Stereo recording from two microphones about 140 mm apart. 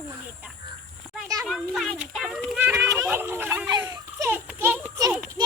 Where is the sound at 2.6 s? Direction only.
15° right (ahead or behind).